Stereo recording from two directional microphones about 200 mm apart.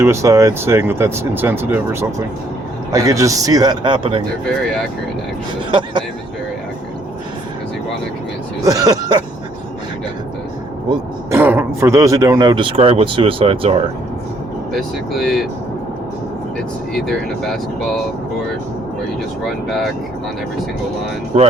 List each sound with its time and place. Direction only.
0.0 s speech: 15° right (ahead or behind)
5.7 s a man's voice: 25° right (ahead or behind)
8.6 s speech: 15° right (ahead or behind)
10.8 s a man's voice: 10° right (ahead or behind); by 13.7 s 30° right (ahead or behind)
14.7 s speech: centre (ahead or behind)
16.9 s speech: centre (ahead or behind)
21.3 s speech: 35° right (ahead or behind)